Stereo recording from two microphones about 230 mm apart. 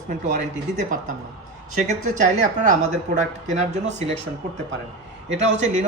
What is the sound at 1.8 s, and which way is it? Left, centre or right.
A woman's voice, right.